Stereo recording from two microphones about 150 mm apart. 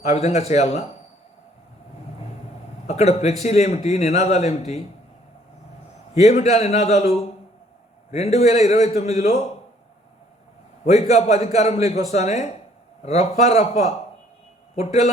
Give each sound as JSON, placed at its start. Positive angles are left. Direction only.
{"t": 0.0, "sound": "a man's voice", "side_deg": 45}
{"t": 2.8, "sound": "a man's voice", "side_deg": 45}
{"t": 6.1, "sound": "a man's voice", "side_deg": 45}
{"t": 10.8, "sound": "a man's voice", "side_deg": 45}